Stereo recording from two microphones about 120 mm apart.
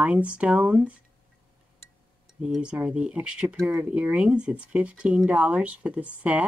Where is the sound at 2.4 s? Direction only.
10° right (ahead or behind).